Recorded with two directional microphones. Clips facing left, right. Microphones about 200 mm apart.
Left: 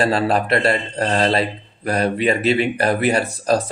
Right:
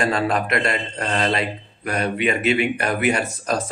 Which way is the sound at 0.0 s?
35° left (ahead or behind).